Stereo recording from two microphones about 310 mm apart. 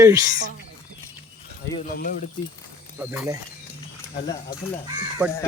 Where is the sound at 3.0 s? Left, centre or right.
Centre.